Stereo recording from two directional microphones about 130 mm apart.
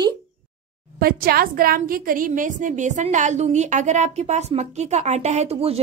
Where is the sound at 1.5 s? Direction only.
90° right; by 5.8 s 50° right (ahead or behind).